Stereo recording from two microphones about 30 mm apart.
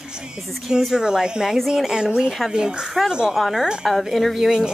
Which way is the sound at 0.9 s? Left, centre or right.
Right.